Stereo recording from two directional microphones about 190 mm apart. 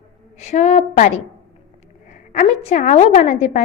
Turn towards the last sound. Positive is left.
turn(degrees=40)  # may be behind; listen again after turning